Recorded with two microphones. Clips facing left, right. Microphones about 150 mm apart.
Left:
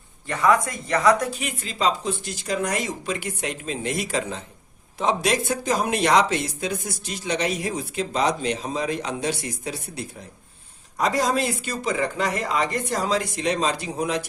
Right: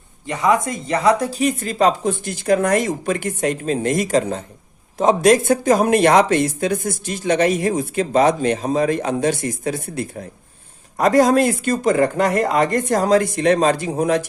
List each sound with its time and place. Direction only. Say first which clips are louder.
0.3 s speech: right 2 dB; 20° right (ahead or behind); by 14.3 s 45° right (ahead or behind)